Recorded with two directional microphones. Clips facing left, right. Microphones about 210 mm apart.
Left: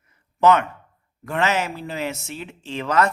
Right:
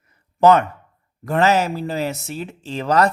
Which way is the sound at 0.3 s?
35° right (ahead or behind).